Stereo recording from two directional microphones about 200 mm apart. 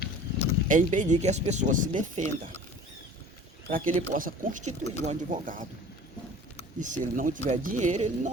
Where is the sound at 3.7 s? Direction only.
40° right (ahead or behind).